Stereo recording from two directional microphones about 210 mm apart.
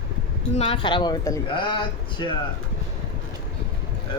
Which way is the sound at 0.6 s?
25° left (ahead or behind).